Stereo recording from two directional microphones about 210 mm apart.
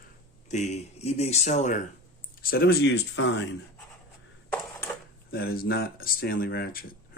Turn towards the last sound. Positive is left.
turn(degrees=45)  # may be behind; listen again after turning